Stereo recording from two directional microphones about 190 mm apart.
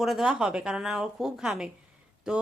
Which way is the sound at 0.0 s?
Centre (ahead or behind).